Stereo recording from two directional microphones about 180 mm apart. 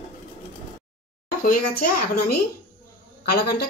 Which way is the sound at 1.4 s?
55° left (ahead or behind).